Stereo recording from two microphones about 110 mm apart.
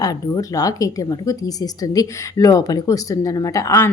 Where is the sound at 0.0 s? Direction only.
35° left (ahead or behind).